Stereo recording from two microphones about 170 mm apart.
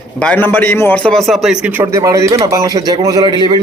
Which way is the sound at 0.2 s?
10° left (ahead or behind).